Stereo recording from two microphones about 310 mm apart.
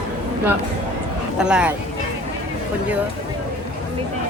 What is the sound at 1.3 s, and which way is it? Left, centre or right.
Speech, centre.